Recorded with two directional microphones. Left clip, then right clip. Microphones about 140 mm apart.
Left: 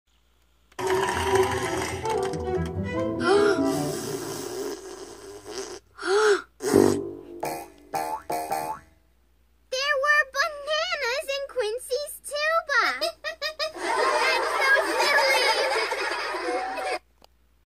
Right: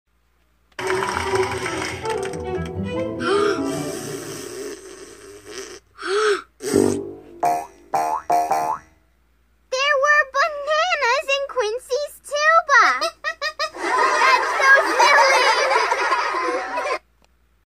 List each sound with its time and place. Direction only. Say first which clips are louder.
0.7 s music: right 2 dB; 10° left (ahead or behind)
2.4 s music: right 2 dB; 5° right (ahead or behind)
3.7 s music: right 1 dB; 35° right (ahead or behind)
4.0 s music: right 1 dB; 5° right (ahead or behind)
4.5 s a sound: even; 5° right (ahead or behind)
5.5 s gasp: right 1 dB; 5° right (ahead or behind)
6.7 s music: right 1 dB; 15° right (ahead or behind)
7.3 s music: right 13 dB; 30° left (ahead or behind)
9.7 s a sound: right 6 dB; 25° left (ahead or behind)
12.3 s giggle: right 9 dB; 20° left (ahead or behind)